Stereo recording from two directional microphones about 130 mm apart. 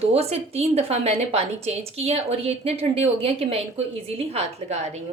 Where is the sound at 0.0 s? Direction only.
55° right (ahead or behind).